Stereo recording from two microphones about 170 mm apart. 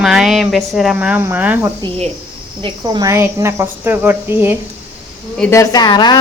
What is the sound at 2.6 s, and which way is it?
Speech, 25° right (ahead or behind).